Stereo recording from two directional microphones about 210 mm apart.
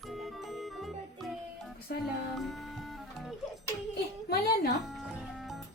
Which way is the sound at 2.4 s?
Centre (ahead or behind).